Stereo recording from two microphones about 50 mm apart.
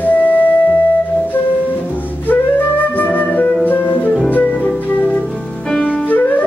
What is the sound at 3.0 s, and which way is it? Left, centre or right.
Flute, left.